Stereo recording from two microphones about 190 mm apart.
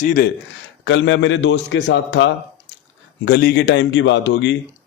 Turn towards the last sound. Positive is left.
turn(degrees=70)  # may be behind; listen again after turning